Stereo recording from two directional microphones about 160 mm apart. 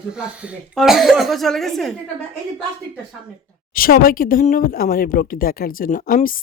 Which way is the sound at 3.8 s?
65° left (ahead or behind).